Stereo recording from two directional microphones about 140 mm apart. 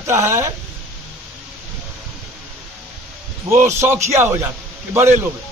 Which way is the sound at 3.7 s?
20° right (ahead or behind).